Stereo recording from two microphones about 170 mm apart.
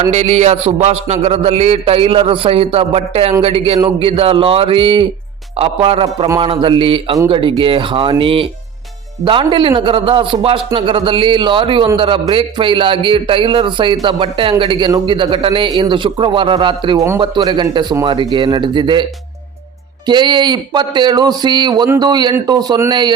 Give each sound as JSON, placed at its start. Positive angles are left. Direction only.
{"t": 0.1, "sound": "a man's voice", "side_deg": -40}
{"t": 20.1, "sound": "a man's voice", "side_deg": -25}